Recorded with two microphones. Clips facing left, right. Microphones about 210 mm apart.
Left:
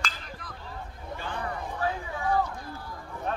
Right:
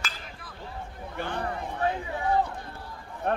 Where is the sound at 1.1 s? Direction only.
60° right (ahead or behind).